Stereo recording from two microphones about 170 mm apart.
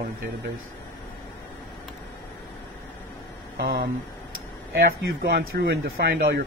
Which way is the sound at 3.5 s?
65° right (ahead or behind).